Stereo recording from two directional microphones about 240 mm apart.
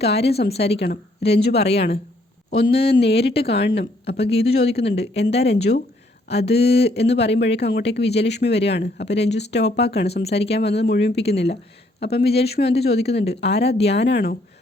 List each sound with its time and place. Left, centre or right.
0.0 s a woman's voice: left
3.0 s speech: left